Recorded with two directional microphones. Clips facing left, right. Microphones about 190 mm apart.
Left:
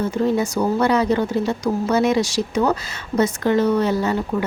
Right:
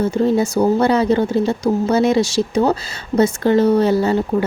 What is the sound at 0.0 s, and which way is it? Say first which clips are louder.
Speech: right 4 dB; 30° right (ahead or behind).